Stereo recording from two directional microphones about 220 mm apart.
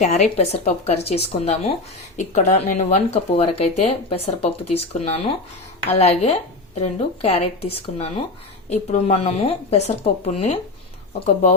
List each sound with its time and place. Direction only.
0.0 s speech: 30° left (ahead or behind)